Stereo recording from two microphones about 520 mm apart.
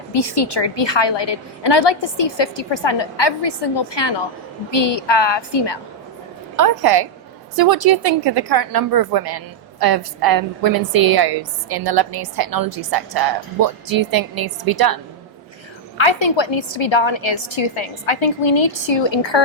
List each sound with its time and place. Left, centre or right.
0.1 s a woman's voice: left
6.6 s a woman's voice: right
16.0 s a woman's voice: left